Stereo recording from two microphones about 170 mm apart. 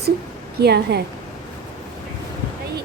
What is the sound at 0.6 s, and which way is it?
Speech, 75° right (ahead or behind).